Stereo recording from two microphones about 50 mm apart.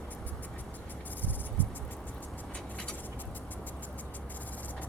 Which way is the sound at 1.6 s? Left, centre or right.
Left.